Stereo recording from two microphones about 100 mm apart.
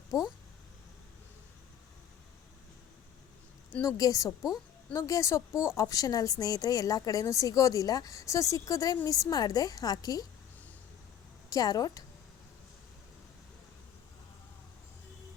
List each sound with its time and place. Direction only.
0.1 s a woman's voice: 35° left (ahead or behind)
3.8 s a woman's voice: 35° left (ahead or behind)
11.4 s a woman's voice: 40° left (ahead or behind)